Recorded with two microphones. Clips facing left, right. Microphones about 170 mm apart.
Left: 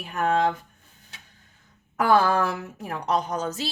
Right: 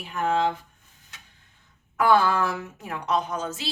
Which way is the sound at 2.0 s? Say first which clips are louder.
Even; 40° left (ahead or behind).